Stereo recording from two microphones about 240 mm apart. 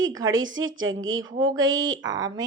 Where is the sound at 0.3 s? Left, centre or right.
Right.